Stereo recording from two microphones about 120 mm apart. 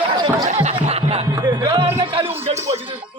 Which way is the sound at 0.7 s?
55° right (ahead or behind).